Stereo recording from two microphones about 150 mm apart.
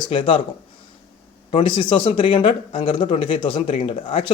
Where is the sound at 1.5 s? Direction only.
35° left (ahead or behind).